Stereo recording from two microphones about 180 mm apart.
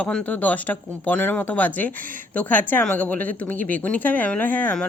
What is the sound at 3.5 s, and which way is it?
Speech, 50° right (ahead or behind).